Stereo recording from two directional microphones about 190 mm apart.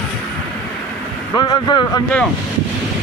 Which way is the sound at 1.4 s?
20° left (ahead or behind).